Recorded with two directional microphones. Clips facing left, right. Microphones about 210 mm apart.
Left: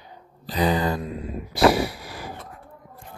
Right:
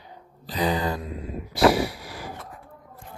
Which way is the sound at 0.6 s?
55° left (ahead or behind).